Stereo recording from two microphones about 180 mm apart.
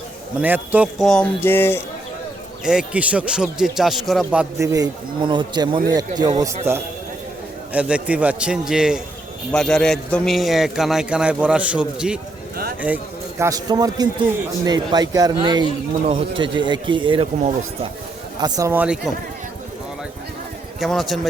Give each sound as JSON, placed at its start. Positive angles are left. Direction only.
{"t": 0.4, "sound": "a man's voice", "side_deg": -10}
{"t": 2.6, "sound": "speech", "side_deg": -5}
{"t": 7.7, "sound": "a man's voice", "side_deg": -5}
{"t": 13.4, "sound": "speech", "side_deg": -20}
{"t": 20.7, "sound": "a man's voice", "side_deg": 0}